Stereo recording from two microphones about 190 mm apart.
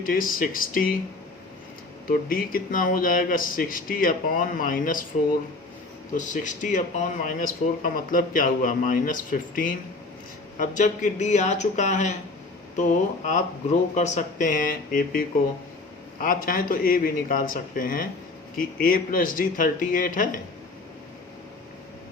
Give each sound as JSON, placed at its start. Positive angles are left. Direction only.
{"t": 0.0, "sound": "speech", "side_deg": 45}
{"t": 2.0, "sound": "speech", "side_deg": 45}
{"t": 6.1, "sound": "speech", "side_deg": 40}